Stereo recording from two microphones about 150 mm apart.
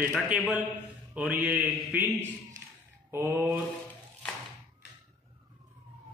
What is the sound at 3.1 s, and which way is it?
Mantra, 15° right (ahead or behind).